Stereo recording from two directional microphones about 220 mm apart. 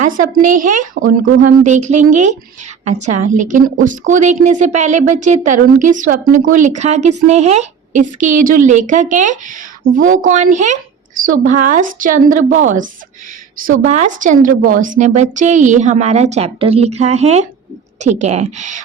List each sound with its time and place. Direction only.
0.3 s speech: 35° right (ahead or behind)